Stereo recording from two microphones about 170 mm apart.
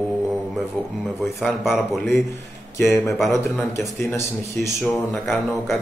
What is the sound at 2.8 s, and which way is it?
Speech, 15° left (ahead or behind).